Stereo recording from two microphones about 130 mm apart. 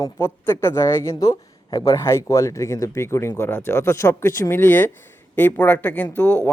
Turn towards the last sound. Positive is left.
turn(degrees=15)  # may be behind; listen again after turning